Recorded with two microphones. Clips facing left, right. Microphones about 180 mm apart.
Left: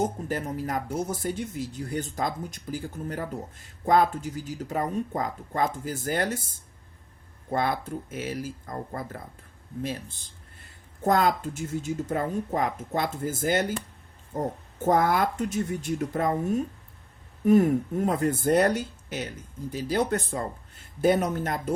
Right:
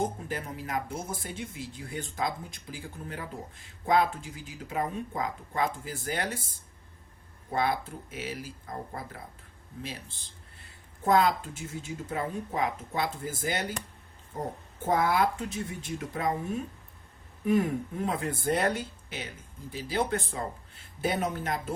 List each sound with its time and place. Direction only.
0.3 s speech: 40° left (ahead or behind)
7.5 s speech: 50° left (ahead or behind)
11.0 s speech: 45° left (ahead or behind)
14.8 s speech: 45° left (ahead or behind)
17.4 s speech: 45° left (ahead or behind)